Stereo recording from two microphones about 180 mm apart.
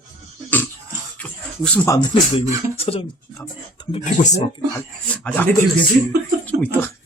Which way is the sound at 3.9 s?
40° left (ahead or behind).